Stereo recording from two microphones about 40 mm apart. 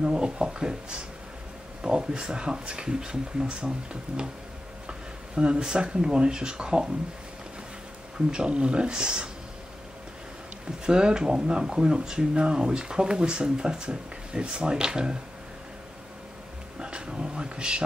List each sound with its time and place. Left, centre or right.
0.0 s speech: right
8.3 s speech: right
10.9 s speech: right
16.8 s speech: right